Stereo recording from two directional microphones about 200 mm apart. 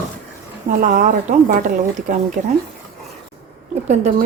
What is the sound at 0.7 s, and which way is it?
A woman's voice, 45° right (ahead or behind).